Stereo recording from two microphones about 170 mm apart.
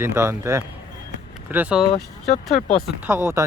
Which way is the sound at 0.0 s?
15° right (ahead or behind).